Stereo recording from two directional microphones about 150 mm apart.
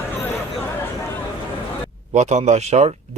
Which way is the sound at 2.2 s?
50° right (ahead or behind).